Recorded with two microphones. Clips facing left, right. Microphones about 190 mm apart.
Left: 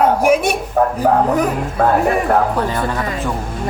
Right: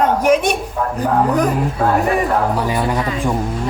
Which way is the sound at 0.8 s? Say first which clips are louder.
Left 6 dB; 50° left (ahead or behind).